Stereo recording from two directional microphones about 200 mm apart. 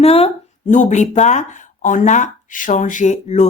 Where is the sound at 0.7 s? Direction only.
35° left (ahead or behind).